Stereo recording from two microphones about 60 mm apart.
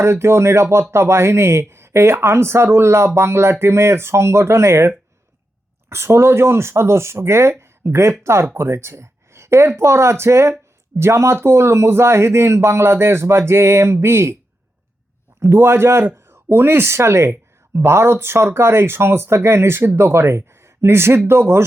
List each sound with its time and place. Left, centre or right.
0.0 s speech: right
5.9 s speech: right
7.6 s a sound: right
8.2 s speech: right
15.4 s speech: right